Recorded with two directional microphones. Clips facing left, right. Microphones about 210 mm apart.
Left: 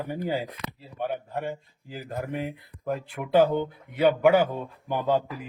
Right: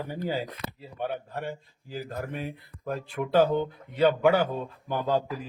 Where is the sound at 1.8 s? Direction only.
15° left (ahead or behind).